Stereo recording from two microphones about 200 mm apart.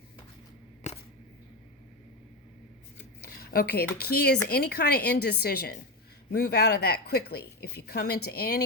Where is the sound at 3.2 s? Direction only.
50° left (ahead or behind).